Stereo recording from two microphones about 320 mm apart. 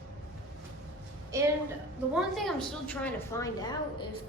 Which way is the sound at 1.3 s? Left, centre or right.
Centre.